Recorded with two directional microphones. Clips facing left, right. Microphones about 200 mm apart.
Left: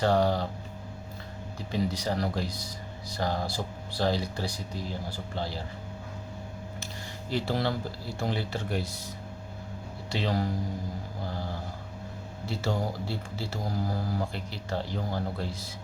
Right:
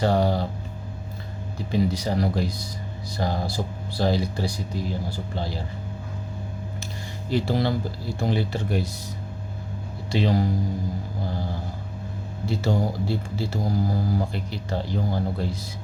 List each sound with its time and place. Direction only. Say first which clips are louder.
0.0 s speech: right 2 dB; 10° right (ahead or behind)
1.5 s speech: right 6 dB; 10° right (ahead or behind)
7.3 s speech: right 5 dB; 15° right (ahead or behind)
10.1 s speech: right 6 dB; 15° right (ahead or behind)
12.5 s speech: right 6 dB; 15° right (ahead or behind)